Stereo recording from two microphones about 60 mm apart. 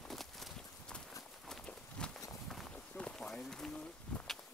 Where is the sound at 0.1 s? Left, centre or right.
Centre.